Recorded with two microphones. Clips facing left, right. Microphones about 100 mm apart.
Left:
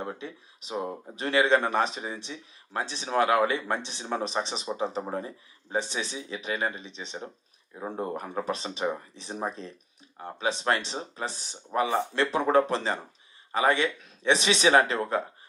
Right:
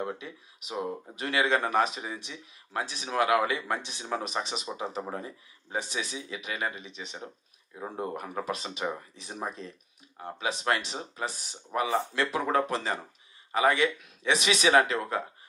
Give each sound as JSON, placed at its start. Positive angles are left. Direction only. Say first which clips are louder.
{"t": 0.0, "sound": "speech", "louder": "right 1 dB", "side_deg": 30}